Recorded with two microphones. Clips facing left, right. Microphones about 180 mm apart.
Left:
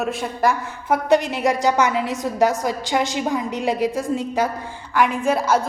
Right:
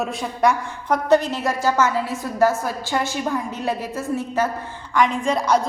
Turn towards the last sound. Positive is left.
turn(degrees=5)  # may be behind; listen again after turning